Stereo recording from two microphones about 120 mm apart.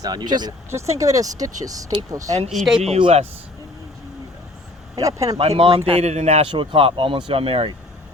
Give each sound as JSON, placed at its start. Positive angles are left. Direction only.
{"t": 0.0, "sound": "speech", "side_deg": -35}
{"t": 0.7, "sound": "speech", "side_deg": -25}
{"t": 2.5, "sound": "speech", "side_deg": 0}
{"t": 3.0, "sound": "a man's voice", "side_deg": -55}
{"t": 4.9, "sound": "speech", "side_deg": -30}
{"t": 5.4, "sound": "a man's voice", "side_deg": -50}
{"t": 6.5, "sound": "speech", "side_deg": -45}